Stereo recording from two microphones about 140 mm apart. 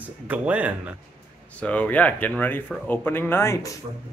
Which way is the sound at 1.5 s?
10° left (ahead or behind).